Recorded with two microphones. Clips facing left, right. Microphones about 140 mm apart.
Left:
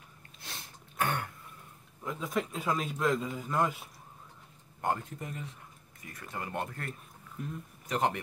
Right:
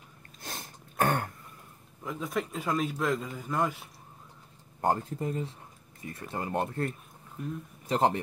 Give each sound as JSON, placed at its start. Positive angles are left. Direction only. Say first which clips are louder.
{"t": 0.4, "sound": "sneeze", "louder": "right 5 dB", "side_deg": -45}
{"t": 2.0, "sound": "a man's voice", "louder": "right 1 dB", "side_deg": 0}
{"t": 4.8, "sound": "speech", "louder": "right 5 dB", "side_deg": -30}
{"t": 7.4, "sound": "a man's voice", "louder": "right 3 dB", "side_deg": 0}
{"t": 7.9, "sound": "a man's voice", "louder": "right 4 dB", "side_deg": -30}